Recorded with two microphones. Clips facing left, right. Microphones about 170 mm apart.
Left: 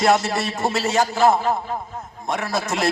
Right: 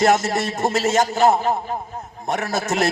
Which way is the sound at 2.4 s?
40° right (ahead or behind).